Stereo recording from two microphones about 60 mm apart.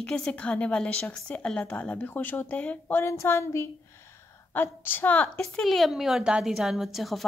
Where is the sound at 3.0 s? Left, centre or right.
Left.